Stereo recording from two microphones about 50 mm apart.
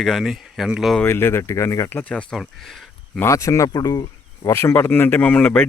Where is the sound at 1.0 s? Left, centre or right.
Left.